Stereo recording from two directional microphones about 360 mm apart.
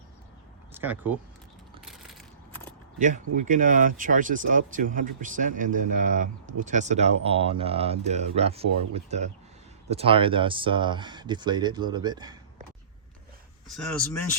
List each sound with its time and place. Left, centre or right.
0.7 s speech: centre
1.8 s crushing: centre
3.0 s speech: right
13.7 s speech: centre